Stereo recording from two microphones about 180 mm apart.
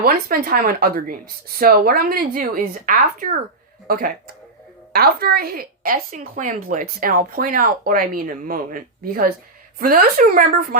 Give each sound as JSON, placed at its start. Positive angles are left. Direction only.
{"t": 0.0, "sound": "a woman's voice", "side_deg": -50}